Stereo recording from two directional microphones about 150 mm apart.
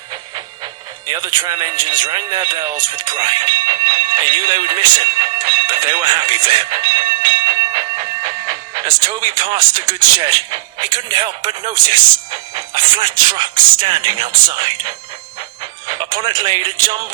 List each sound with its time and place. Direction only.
0.6 s music: 30° right (ahead or behind)
1.9 s speech: 30° right (ahead or behind)